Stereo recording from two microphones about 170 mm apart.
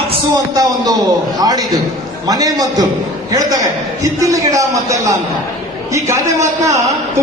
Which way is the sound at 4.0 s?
20° right (ahead or behind).